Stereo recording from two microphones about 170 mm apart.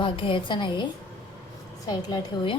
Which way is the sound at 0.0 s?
30° left (ahead or behind).